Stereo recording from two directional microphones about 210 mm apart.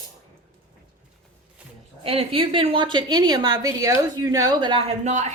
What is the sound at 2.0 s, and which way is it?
A woman's voice, 25° right (ahead or behind).